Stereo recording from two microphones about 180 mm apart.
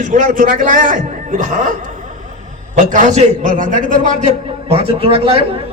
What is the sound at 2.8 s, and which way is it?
A man's voice, 45° right (ahead or behind).